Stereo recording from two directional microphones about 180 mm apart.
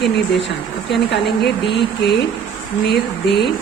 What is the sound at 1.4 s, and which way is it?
Speech, 70° left (ahead or behind).